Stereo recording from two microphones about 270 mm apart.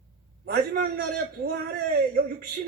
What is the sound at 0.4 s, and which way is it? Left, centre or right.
Speech, right.